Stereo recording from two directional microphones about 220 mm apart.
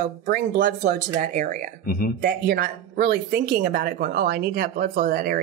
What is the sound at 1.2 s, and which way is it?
Speech, 35° right (ahead or behind).